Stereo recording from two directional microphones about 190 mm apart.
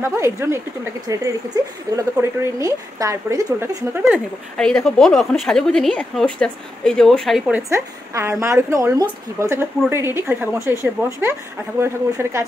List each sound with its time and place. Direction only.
0.0 s speech: 15° right (ahead or behind)
4.6 s a woman's voice: 5° left (ahead or behind)
7.7 s speech: 15° right (ahead or behind)